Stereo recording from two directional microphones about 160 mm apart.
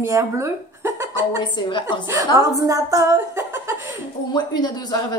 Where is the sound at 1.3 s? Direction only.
30° left (ahead or behind).